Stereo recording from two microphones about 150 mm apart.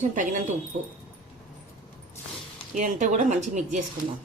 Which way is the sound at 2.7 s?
55° right (ahead or behind).